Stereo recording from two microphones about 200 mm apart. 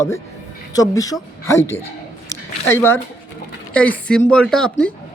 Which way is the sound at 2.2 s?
10° left (ahead or behind).